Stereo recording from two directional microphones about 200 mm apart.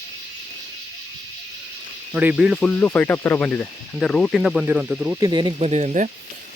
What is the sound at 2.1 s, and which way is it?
Speech, 5° right (ahead or behind).